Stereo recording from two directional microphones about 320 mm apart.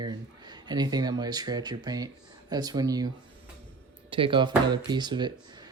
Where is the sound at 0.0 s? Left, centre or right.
Centre.